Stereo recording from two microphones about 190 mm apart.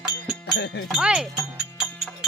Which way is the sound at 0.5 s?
65° left (ahead or behind).